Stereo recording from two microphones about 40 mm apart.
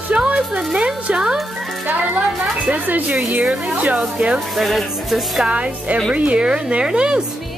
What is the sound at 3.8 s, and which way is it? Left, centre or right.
Speech, right.